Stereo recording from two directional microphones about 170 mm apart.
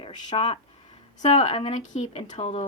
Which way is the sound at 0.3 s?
40° left (ahead or behind).